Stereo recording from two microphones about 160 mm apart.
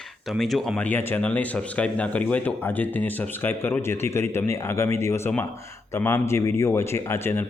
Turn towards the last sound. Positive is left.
turn(degrees=15)  # may be behind; listen again after turning